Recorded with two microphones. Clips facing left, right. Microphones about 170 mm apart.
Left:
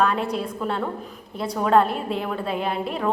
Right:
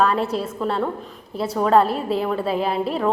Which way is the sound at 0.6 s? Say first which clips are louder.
Right 3 dB; centre (ahead or behind).